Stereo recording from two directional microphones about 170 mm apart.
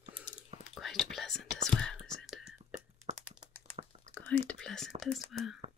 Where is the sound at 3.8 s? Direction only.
40° right (ahead or behind).